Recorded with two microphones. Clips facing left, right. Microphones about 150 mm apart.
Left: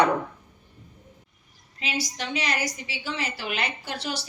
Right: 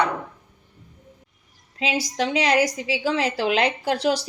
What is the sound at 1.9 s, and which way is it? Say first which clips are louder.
A woman's voice: right 6 dB; 90° right.